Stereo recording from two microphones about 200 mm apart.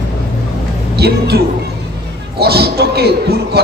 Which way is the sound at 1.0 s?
55° right (ahead or behind).